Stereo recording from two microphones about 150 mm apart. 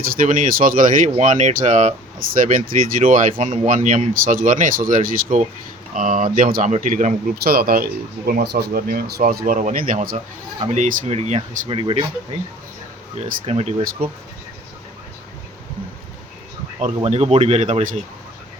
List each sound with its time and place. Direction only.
0.1 s speech: 65° right (ahead or behind)
10.6 s speech: 50° right (ahead or behind)
11.7 s speech: 35° right (ahead or behind)
13.4 s speech: 45° right (ahead or behind)
16.8 s speech: 45° right (ahead or behind)